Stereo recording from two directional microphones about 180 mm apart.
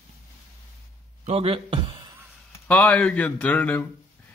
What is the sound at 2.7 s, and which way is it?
Speech, 5° left (ahead or behind).